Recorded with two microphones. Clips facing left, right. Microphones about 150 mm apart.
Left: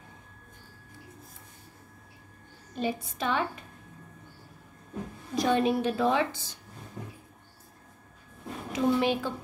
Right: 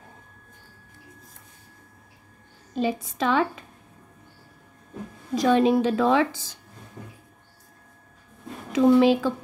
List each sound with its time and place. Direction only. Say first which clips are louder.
2.7 s a woman's voice: right 5 dB; 90° right
5.3 s a woman's voice: right 6 dB; 90° right
8.7 s a woman's voice: right 9 dB; 90° right